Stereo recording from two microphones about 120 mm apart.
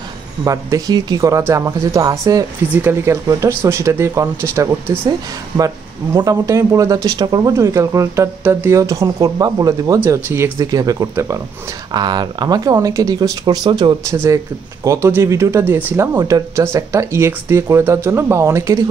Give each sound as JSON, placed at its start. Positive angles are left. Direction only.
{"t": 0.4, "sound": "speech", "side_deg": -30}
{"t": 2.7, "sound": "speech", "side_deg": -20}
{"t": 6.1, "sound": "speech", "side_deg": -25}
{"t": 10.7, "sound": "speech", "side_deg": -30}
{"t": 11.9, "sound": "speech", "side_deg": -35}
{"t": 14.1, "sound": "speech", "side_deg": -25}
{"t": 16.2, "sound": "speech", "side_deg": -30}